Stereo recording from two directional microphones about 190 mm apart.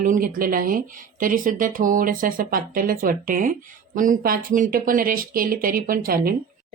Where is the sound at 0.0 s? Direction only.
45° right (ahead or behind).